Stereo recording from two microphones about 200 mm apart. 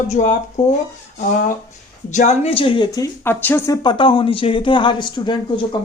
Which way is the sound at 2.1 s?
35° left (ahead or behind).